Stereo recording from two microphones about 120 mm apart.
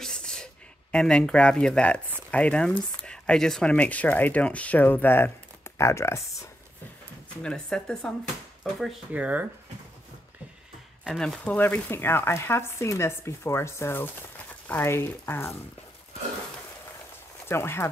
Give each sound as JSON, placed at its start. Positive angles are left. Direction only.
{"t": 0.0, "sound": "a sound", "side_deg": 5}
{"t": 0.9, "sound": "speech", "side_deg": 5}
{"t": 7.4, "sound": "speech", "side_deg": 5}
{"t": 11.1, "sound": "speech", "side_deg": 5}
{"t": 17.5, "sound": "speech", "side_deg": 20}